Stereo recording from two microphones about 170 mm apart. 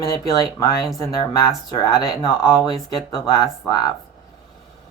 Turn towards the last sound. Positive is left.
turn(degrees=20)  # may be behind; listen again after turning